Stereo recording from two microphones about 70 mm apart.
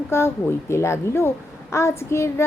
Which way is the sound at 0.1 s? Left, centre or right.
Left.